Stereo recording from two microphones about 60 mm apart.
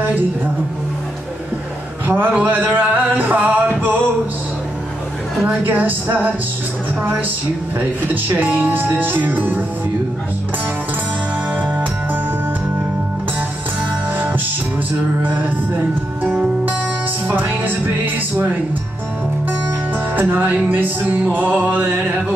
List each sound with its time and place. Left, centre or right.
2.0 s music: right
5.4 s speech: right
7.0 s music: right
8.1 s speech: right
11.5 s music: right
14.1 s music: right
17.3 s speech: right
20.2 s music: right